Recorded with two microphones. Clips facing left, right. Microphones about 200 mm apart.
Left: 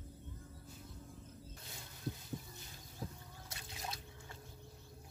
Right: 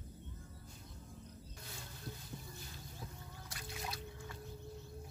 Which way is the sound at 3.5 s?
25° left (ahead or behind).